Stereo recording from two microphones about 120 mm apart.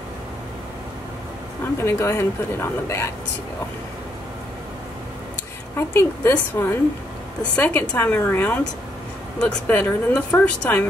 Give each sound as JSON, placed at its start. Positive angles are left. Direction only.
{"t": 1.6, "sound": "speech", "side_deg": 20}
{"t": 5.8, "sound": "speech", "side_deg": 20}